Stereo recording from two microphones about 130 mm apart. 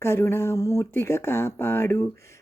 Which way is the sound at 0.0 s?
20° left (ahead or behind).